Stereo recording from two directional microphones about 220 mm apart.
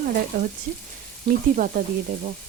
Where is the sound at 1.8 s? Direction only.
40° right (ahead or behind).